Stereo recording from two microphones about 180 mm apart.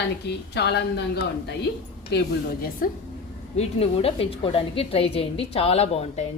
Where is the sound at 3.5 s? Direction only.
35° left (ahead or behind).